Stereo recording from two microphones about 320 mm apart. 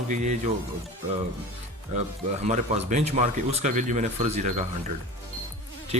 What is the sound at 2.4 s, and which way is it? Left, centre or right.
Speech, right.